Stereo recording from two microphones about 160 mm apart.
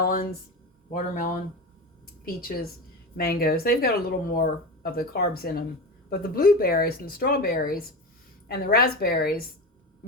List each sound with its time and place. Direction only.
0.0 s speech: 65° left (ahead or behind)
0.9 s speech: 55° left (ahead or behind)
2.2 s speech: 70° left (ahead or behind)